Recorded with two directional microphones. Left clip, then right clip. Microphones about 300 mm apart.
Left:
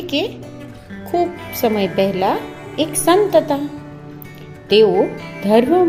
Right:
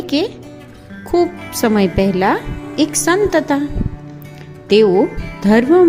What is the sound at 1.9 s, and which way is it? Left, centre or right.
A woman's voice, right.